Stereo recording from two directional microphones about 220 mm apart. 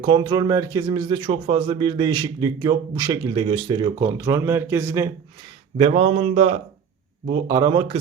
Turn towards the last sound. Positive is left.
turn(degrees=-20)  # may be behind; listen again after turning